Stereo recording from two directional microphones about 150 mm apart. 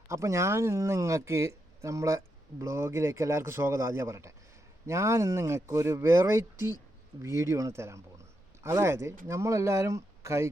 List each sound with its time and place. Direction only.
0.1 s speech: 20° right (ahead or behind)